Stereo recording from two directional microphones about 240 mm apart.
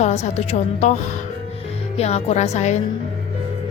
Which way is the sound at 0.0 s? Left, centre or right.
Left.